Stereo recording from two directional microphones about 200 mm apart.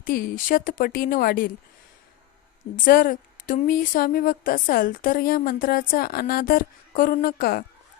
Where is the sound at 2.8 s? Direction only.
45° left (ahead or behind).